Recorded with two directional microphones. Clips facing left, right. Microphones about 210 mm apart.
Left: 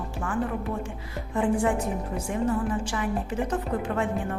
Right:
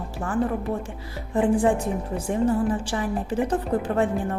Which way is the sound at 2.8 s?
35° right (ahead or behind).